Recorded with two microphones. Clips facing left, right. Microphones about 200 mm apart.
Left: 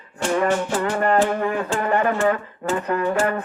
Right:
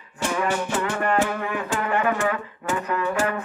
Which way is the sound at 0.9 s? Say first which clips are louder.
Left 5 dB; 40° left (ahead or behind).